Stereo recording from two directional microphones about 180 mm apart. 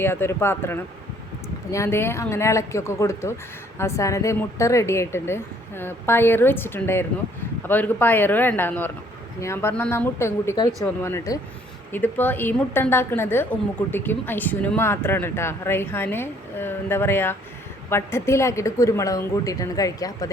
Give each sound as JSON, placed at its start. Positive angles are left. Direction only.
{"t": 0.0, "sound": "a woman's voice", "side_deg": 10}
{"t": 10.7, "sound": "speech", "side_deg": 0}
{"t": 11.0, "sound": "a woman's voice", "side_deg": 15}